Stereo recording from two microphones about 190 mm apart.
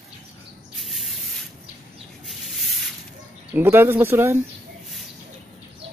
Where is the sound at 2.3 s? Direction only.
Centre (ahead or behind).